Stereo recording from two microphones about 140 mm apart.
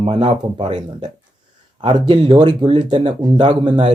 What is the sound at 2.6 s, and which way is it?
Speech, 45° right (ahead or behind).